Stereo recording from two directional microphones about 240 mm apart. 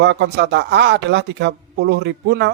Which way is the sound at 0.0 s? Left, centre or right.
Right.